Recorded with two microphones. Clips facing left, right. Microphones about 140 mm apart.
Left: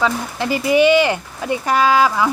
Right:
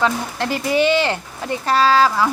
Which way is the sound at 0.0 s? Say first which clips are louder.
Even; 10° left (ahead or behind).